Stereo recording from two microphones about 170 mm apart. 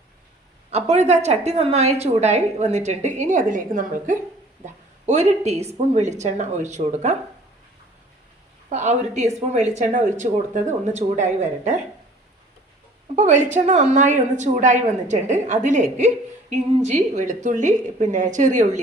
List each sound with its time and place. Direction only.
0.7 s a woman's voice: 40° right (ahead or behind)
8.7 s speech: 45° right (ahead or behind)
13.1 s speech: 45° right (ahead or behind)